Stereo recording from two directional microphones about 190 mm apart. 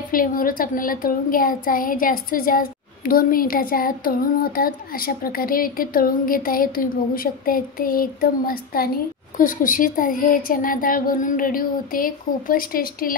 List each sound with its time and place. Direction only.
0.1 s a child's voice: 50° left (ahead or behind)